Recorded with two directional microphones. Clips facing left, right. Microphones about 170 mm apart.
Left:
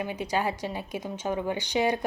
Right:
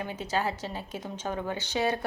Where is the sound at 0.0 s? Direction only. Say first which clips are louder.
Left 2 dB; 15° left (ahead or behind).